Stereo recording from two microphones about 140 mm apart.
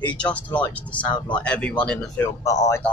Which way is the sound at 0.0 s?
10° left (ahead or behind).